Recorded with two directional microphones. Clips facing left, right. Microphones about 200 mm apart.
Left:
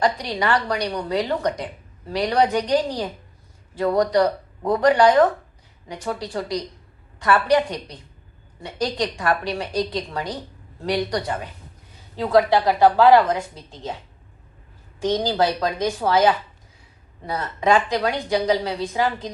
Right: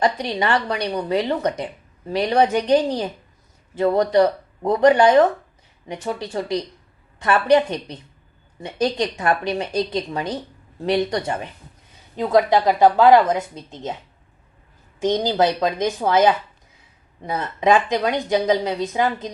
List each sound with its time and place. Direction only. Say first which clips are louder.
0.0 s a woman's voice: right 1 dB; 20° right (ahead or behind)
14.9 s a woman's voice: right 2 dB; 20° right (ahead or behind)